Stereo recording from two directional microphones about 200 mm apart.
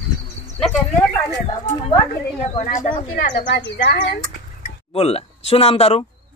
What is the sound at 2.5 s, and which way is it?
Speech, 35° left (ahead or behind).